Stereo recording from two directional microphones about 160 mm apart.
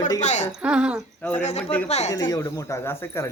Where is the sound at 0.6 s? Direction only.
5° right (ahead or behind).